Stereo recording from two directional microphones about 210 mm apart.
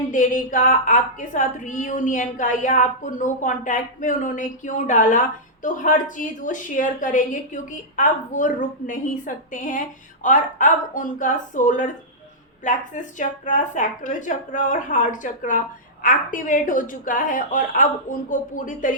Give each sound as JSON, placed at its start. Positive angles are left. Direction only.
{"t": 0.1, "sound": "a woman's voice", "side_deg": 35}